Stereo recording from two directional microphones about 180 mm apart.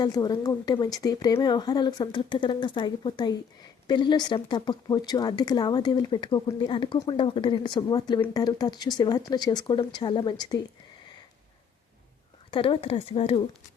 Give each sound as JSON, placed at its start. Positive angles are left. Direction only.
{"t": 0.0, "sound": "speech", "side_deg": 20}
{"t": 12.5, "sound": "speech", "side_deg": 30}